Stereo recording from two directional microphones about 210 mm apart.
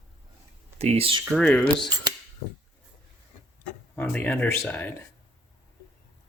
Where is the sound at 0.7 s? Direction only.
30° right (ahead or behind).